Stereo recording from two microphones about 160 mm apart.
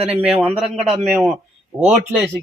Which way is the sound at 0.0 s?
40° right (ahead or behind).